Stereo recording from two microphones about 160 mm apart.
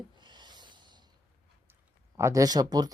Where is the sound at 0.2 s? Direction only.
30° right (ahead or behind).